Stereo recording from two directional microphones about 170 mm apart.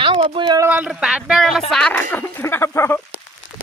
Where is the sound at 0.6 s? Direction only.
10° right (ahead or behind); by 3.0 s 15° left (ahead or behind).